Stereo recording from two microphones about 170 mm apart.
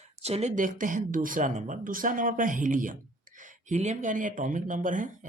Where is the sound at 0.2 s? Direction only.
40° right (ahead or behind).